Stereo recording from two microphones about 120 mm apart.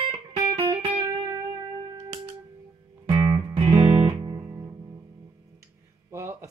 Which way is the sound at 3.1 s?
40° right (ahead or behind).